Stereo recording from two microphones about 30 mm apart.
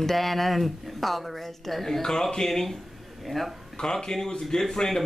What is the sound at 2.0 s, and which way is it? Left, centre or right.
Speech, centre.